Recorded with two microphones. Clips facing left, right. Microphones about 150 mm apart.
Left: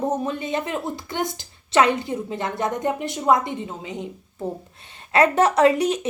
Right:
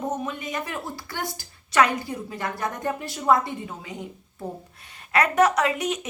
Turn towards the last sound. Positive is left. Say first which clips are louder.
# left 7 dB
turn(degrees=35)  # may be behind; listen again after turning